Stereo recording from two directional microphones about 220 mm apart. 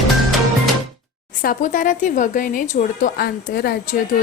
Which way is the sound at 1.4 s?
40° left (ahead or behind).